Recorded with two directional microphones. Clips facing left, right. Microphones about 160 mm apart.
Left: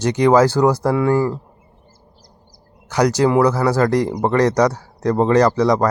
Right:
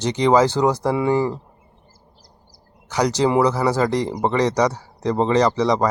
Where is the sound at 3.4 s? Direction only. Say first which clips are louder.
Left 3 dB; 15° right (ahead or behind).